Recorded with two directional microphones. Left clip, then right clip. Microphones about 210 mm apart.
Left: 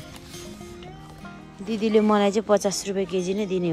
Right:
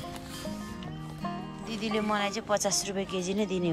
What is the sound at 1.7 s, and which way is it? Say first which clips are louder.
Speech: left 10 dB; 10° right (ahead or behind).